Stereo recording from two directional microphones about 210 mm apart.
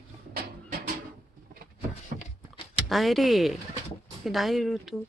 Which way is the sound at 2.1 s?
35° right (ahead or behind).